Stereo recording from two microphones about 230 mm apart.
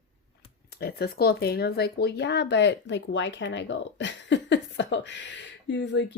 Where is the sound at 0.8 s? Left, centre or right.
Left.